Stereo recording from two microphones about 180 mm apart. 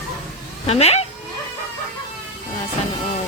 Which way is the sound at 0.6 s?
35° left (ahead or behind).